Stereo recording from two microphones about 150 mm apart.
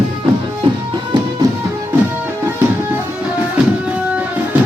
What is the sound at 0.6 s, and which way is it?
Music, 30° right (ahead or behind).